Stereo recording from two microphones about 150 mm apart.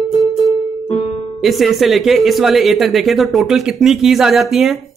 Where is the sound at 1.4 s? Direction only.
Centre (ahead or behind).